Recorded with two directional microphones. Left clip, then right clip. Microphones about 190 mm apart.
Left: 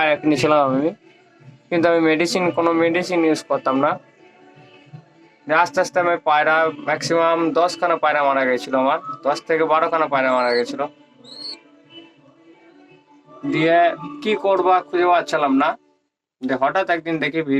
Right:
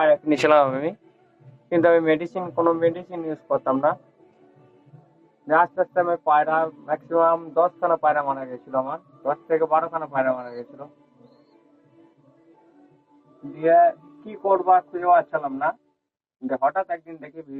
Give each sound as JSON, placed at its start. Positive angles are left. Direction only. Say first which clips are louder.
{"t": 0.0, "sound": "speech", "louder": "left 1 dB", "side_deg": 15}
{"t": 2.4, "sound": "speech", "louder": "left 3 dB", "side_deg": 25}
{"t": 5.9, "sound": "speech", "louder": "left 2 dB", "side_deg": 35}
{"t": 13.4, "sound": "speech", "louder": "left 1 dB", "side_deg": 30}